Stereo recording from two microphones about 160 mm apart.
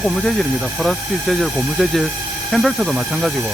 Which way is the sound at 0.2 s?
Centre (ahead or behind).